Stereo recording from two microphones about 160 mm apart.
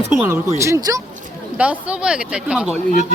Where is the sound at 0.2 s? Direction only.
15° right (ahead or behind).